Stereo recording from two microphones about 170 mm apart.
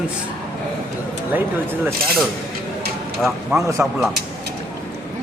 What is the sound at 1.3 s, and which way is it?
Speech, 10° right (ahead or behind).